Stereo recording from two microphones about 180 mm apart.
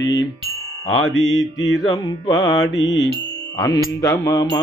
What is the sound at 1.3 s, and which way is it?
Mantra, 20° left (ahead or behind).